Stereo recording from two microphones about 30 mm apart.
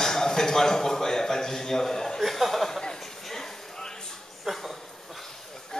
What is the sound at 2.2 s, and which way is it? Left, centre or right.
Chuckle, centre.